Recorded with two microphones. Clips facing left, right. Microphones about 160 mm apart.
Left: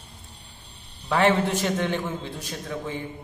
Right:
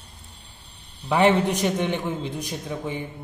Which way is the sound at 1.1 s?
15° right (ahead or behind).